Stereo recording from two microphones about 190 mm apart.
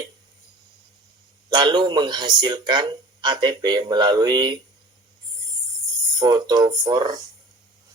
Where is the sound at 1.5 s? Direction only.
20° right (ahead or behind).